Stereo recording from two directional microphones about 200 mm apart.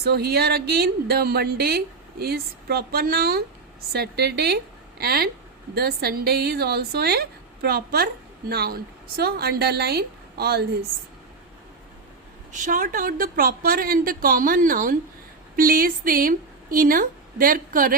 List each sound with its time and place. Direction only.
0.0 s a woman's voice: 50° right (ahead or behind)
12.5 s a woman's voice: 40° right (ahead or behind)